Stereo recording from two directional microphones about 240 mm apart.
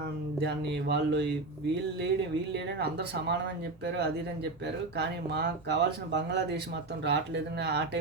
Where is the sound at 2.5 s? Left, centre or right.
Right.